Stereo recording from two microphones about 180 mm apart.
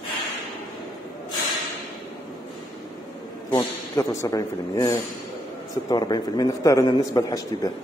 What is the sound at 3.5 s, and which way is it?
A man's voice, 15° left (ahead or behind).